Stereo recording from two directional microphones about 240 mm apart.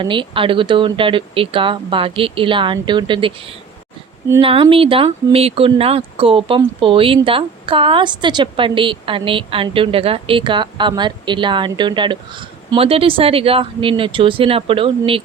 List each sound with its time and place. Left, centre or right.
0.0 s speech: centre